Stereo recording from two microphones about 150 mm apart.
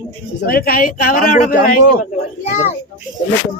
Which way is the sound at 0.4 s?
80° left.